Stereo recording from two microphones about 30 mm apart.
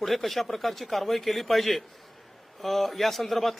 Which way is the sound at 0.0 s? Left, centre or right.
Centre.